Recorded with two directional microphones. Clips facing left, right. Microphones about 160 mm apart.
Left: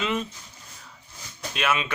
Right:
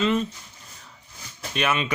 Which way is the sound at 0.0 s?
10° left (ahead or behind).